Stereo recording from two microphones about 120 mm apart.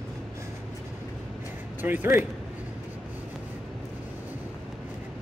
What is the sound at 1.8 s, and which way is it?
Speech, 15° right (ahead or behind).